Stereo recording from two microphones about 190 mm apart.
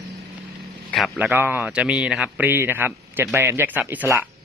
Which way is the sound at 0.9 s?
5° left (ahead or behind).